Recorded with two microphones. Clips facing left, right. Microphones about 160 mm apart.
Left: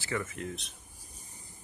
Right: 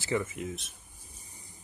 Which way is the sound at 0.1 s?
10° right (ahead or behind).